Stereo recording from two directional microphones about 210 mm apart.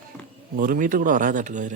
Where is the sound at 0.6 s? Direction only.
40° right (ahead or behind).